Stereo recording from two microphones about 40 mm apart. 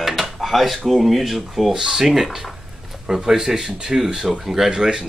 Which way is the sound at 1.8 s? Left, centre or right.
Centre.